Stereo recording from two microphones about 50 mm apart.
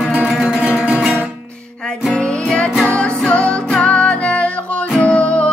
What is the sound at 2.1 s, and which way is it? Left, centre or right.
Music, centre.